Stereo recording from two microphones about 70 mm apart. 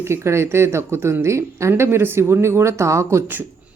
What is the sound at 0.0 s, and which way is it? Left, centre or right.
Speech, right.